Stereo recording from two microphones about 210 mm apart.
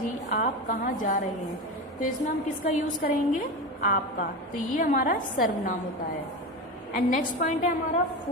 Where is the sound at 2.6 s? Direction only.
40° left (ahead or behind).